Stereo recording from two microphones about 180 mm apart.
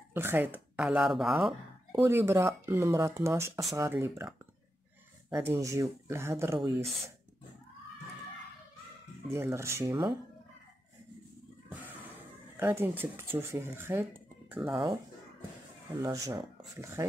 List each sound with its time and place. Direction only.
0.1 s speech: 10° right (ahead or behind)
2.0 s speech: 15° right (ahead or behind)
5.3 s speech: 15° right (ahead or behind)
9.4 s speech: 15° right (ahead or behind)
12.5 s speech: 10° right (ahead or behind)
14.5 s speech: 5° right (ahead or behind)
15.9 s speech: 20° right (ahead or behind)